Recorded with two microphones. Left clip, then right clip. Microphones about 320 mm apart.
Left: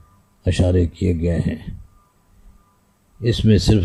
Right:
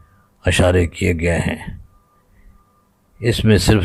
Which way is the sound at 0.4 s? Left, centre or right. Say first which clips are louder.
Right 5 dB; right.